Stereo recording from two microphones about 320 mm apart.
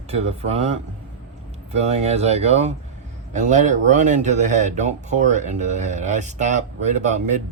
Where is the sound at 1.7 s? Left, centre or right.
Centre.